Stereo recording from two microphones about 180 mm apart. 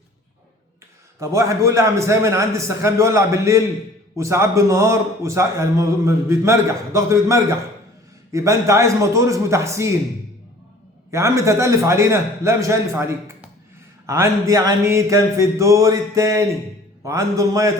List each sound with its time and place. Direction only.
1.2 s a man's voice: 15° right (ahead or behind)
11.1 s a man's voice: 15° right (ahead or behind)